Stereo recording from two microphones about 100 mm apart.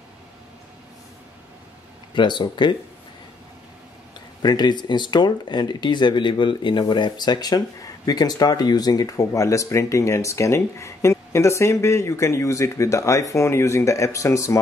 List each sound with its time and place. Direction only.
2.1 s speech: 50° left (ahead or behind)
4.4 s speech: 45° left (ahead or behind)